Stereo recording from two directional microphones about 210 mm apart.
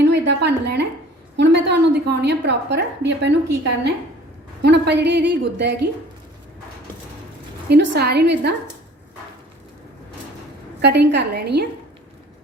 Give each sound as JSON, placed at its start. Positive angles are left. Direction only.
{"t": 0.0, "sound": "a sound", "side_deg": -55}
{"t": 1.4, "sound": "a woman's voice", "side_deg": -55}
{"t": 7.7, "sound": "a woman's voice", "side_deg": -50}
{"t": 10.8, "sound": "a woman's voice", "side_deg": -50}